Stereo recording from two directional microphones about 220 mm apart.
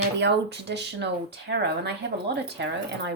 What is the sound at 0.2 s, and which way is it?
Speech, 50° right (ahead or behind).